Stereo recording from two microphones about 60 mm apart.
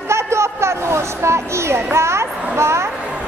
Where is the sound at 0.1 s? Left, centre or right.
Right.